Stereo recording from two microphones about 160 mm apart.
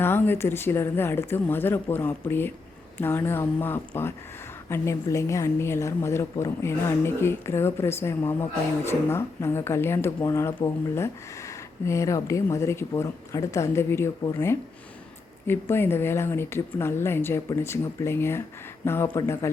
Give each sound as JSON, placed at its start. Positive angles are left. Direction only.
{"t": 0.0, "sound": "a woman's voice", "side_deg": 15}